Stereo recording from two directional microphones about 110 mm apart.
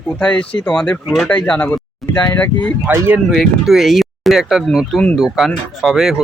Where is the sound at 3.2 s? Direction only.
Centre (ahead or behind).